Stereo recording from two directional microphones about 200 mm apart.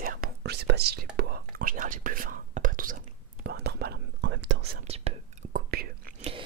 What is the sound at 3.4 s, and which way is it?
Whispering, 55° right (ahead or behind).